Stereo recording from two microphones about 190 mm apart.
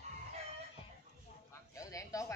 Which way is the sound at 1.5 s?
15° left (ahead or behind).